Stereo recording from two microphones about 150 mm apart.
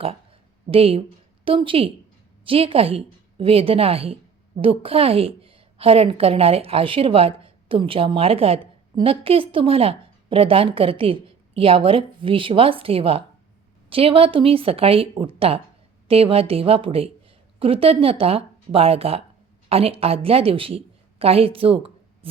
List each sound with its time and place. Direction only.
0.7 s a woman's voice: 40° right (ahead or behind)